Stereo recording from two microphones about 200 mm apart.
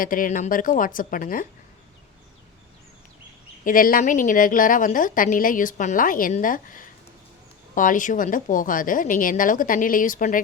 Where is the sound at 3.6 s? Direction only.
45° left (ahead or behind).